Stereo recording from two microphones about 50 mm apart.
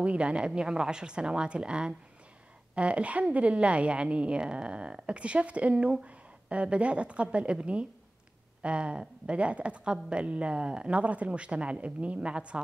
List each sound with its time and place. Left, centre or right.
0.0 s a woman's voice: right